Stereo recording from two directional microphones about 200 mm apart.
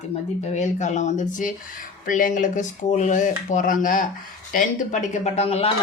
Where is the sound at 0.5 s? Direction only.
35° left (ahead or behind).